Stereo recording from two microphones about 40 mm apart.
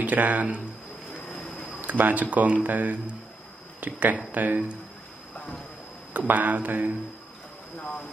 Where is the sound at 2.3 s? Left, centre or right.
Right.